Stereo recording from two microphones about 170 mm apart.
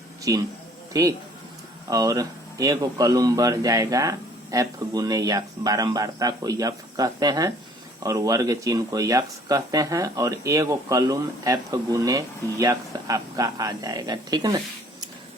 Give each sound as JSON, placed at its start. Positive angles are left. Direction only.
{"t": 0.3, "sound": "speech", "side_deg": -20}